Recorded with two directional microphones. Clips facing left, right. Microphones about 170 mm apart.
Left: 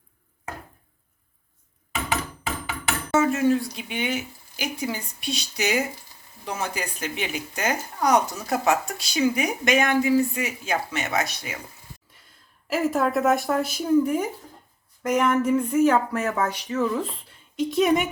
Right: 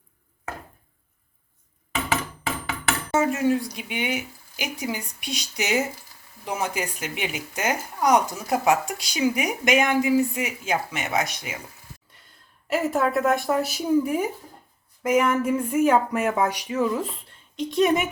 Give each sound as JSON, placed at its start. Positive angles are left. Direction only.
{"t": 3.1, "sound": "speech", "side_deg": -15}
{"t": 12.6, "sound": "speech", "side_deg": 0}